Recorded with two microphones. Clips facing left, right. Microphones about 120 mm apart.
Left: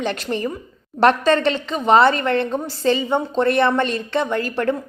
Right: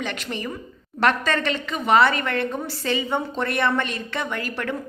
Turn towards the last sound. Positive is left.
turn(degrees=30)  # may be behind; listen again after turning